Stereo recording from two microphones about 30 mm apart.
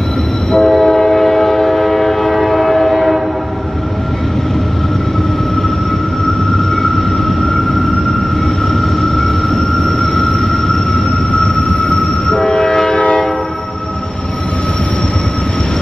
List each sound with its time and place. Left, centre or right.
0.5 s train: centre
9.0 s vehicle: centre
11.3 s train: left
12.9 s train: left